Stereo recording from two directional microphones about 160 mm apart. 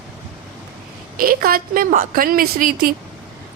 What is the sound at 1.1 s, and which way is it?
A woman's voice, 65° right (ahead or behind).